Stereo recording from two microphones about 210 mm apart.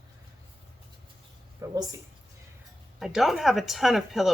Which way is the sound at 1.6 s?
15° right (ahead or behind).